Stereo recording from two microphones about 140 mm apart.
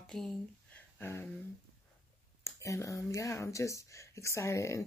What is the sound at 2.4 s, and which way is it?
Speech, 20° left (ahead or behind).